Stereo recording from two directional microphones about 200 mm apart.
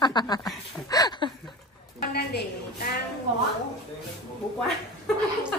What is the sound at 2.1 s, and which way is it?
Speech, 55° left (ahead or behind).